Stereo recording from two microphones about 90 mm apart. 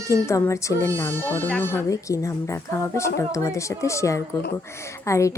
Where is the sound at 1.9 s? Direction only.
35° left (ahead or behind).